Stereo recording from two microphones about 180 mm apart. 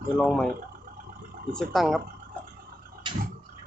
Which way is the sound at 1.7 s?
Centre (ahead or behind).